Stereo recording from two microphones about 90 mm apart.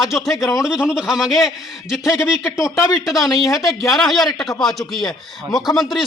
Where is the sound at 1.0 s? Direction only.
5° right (ahead or behind).